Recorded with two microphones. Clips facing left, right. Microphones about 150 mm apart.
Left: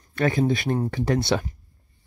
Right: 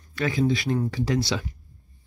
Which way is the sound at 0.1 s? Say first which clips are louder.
Left 2 dB; 50° left (ahead or behind).